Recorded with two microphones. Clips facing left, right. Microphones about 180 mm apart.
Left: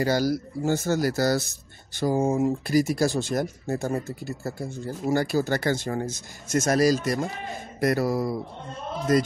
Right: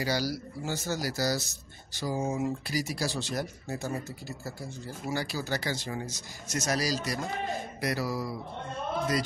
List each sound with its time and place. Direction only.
0.0 s speech: 50° left (ahead or behind)